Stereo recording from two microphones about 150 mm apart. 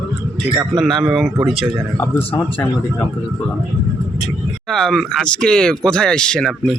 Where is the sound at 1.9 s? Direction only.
15° left (ahead or behind).